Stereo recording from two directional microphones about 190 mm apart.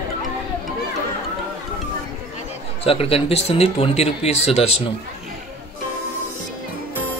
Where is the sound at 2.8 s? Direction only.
30° left (ahead or behind).